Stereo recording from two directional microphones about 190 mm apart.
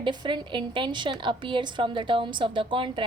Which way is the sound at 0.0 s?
25° right (ahead or behind).